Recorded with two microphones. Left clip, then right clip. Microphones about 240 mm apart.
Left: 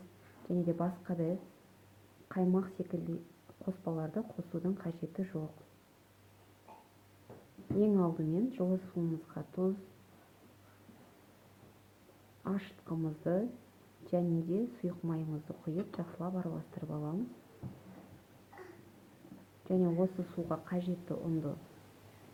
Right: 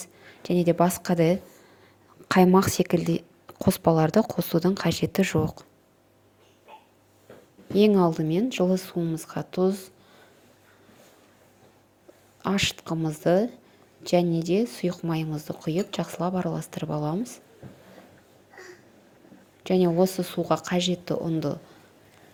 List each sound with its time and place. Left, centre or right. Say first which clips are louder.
0.4 s speech: right 14 dB; right
2.3 s speech: right 16 dB; right
7.8 s speech: right 12 dB; right
12.4 s speech: right 16 dB; right
19.6 s speech: right 11 dB; right